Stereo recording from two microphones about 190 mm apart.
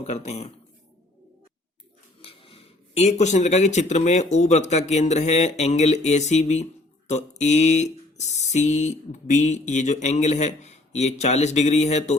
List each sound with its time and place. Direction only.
0.0 s speech: 35° left (ahead or behind)
2.2 s speech: 30° left (ahead or behind)